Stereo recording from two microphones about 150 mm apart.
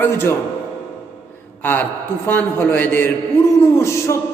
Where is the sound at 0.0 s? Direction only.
15° left (ahead or behind).